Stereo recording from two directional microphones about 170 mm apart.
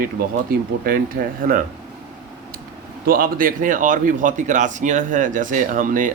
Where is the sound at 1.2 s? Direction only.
65° right (ahead or behind).